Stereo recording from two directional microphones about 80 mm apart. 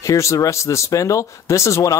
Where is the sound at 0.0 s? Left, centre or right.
Left.